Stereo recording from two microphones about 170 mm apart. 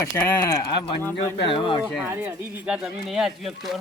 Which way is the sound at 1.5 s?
30° left (ahead or behind).